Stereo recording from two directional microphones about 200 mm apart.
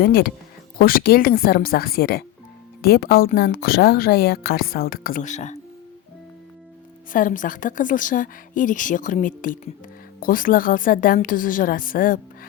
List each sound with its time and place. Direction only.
0.0 s a woman's voice: 50° left (ahead or behind)
7.1 s a woman's voice: 40° left (ahead or behind)